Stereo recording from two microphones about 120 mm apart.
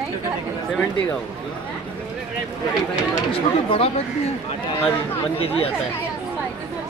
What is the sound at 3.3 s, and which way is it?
Speech, 50° left (ahead or behind).